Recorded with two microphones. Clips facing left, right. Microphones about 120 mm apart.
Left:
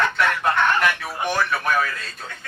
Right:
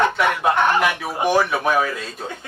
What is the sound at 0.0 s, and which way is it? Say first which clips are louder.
Chicken: right 3 dB; 20° right (ahead or behind).